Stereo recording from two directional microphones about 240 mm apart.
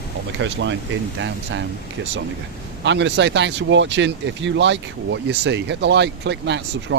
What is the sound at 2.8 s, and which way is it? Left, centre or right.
Speech, right.